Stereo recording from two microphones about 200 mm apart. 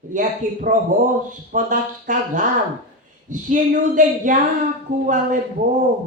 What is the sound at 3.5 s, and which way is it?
Speech, 40° right (ahead or behind).